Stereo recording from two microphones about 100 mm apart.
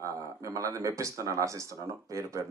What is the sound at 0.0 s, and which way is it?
Speech, 35° right (ahead or behind).